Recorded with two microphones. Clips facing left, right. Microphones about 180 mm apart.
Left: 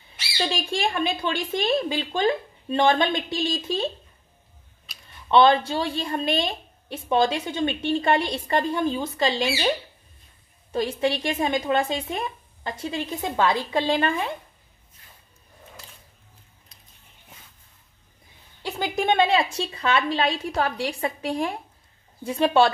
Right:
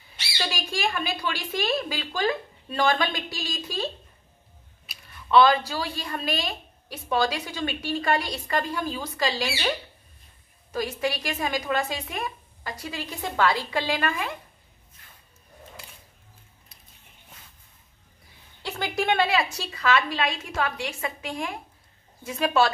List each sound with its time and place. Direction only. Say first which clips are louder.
0.1 s a woman's voice: left 5 dB; 30° left (ahead or behind)
5.3 s a woman's voice: left 2 dB; 25° left (ahead or behind)
18.6 s a woman's voice: left 2 dB; 15° left (ahead or behind)